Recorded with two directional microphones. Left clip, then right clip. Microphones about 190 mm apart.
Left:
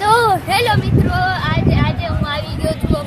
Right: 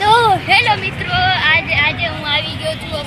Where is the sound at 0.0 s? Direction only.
5° right (ahead or behind).